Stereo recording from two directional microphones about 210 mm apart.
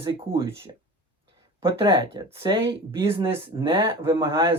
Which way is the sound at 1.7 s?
20° right (ahead or behind).